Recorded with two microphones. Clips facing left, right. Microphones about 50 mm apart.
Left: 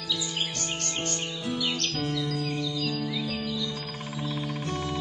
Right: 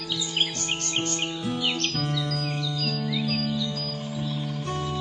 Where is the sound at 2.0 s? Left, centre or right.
Right.